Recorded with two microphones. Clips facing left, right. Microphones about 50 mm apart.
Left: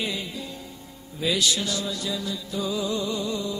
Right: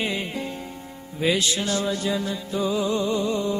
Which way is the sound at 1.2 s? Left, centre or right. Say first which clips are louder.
Right 2 dB; right.